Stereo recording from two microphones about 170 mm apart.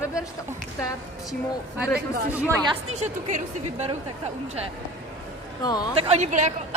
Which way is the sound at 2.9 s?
40° right (ahead or behind).